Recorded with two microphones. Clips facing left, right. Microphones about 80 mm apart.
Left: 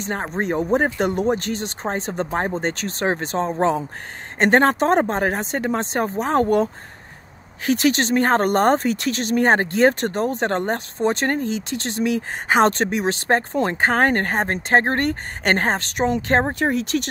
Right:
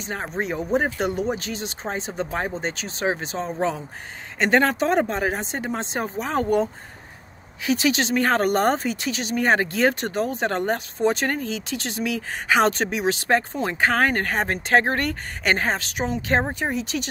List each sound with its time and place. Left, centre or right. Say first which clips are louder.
0.4 s speech: left 3 dB; left